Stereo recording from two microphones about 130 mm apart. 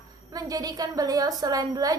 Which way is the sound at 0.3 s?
30° right (ahead or behind).